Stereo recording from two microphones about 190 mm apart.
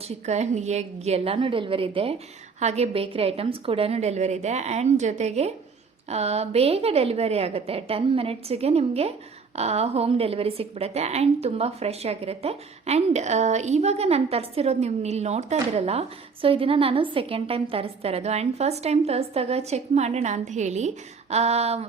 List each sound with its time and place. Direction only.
0.3 s a woman's voice: 35° right (ahead or behind)